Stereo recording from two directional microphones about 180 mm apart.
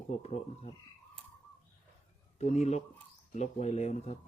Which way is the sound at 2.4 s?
40° left (ahead or behind).